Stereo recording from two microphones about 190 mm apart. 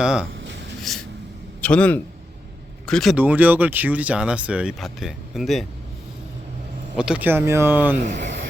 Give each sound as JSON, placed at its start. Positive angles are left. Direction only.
{"t": 0.0, "sound": "speech", "side_deg": -5}
{"t": 0.3, "sound": "writing", "side_deg": -70}
{"t": 0.8, "sound": "a sound", "side_deg": 0}
{"t": 1.6, "sound": "a man's voice", "side_deg": 5}
{"t": 6.9, "sound": "speech", "side_deg": -5}
{"t": 8.1, "sound": "a sound", "side_deg": -70}